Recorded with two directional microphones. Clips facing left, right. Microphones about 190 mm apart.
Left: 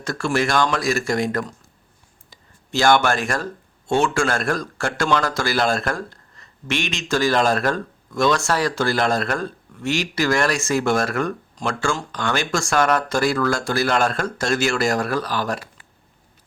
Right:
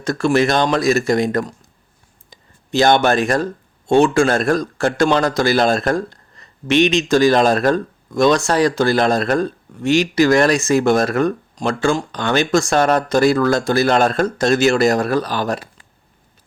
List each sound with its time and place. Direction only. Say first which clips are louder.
0.0 s speech: right 6 dB; 20° right (ahead or behind)